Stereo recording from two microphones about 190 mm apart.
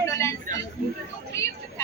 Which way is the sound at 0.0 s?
15° left (ahead or behind).